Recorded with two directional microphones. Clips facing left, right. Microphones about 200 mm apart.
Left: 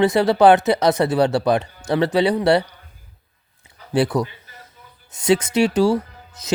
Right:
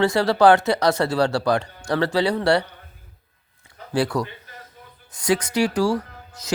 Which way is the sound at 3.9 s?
20° left (ahead or behind).